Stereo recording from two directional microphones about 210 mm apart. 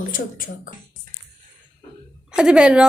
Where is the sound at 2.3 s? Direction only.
5° right (ahead or behind).